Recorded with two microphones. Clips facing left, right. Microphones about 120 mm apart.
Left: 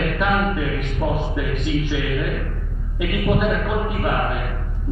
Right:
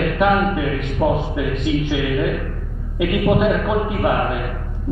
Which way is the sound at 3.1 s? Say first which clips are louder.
Right 4 dB; 20° right (ahead or behind).